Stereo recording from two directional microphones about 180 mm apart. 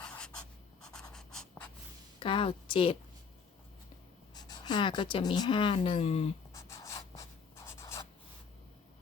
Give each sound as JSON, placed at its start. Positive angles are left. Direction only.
{"t": 0.0, "sound": "writing", "side_deg": 5}
{"t": 2.1, "sound": "a woman's voice", "side_deg": 30}
{"t": 4.4, "sound": "speech", "side_deg": 25}
{"t": 6.5, "sound": "a sound", "side_deg": 15}
{"t": 7.5, "sound": "writing", "side_deg": 15}